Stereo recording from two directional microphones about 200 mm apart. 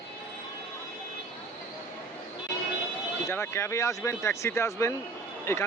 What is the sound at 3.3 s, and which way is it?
Speech, 15° left (ahead or behind).